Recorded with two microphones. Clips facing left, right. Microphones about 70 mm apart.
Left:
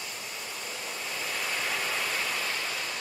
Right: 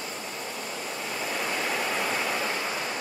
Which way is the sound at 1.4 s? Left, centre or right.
Centre.